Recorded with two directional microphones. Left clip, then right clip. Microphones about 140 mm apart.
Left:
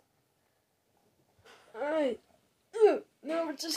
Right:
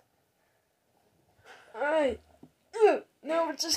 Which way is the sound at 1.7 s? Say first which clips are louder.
Right 4 dB; 25° left (ahead or behind).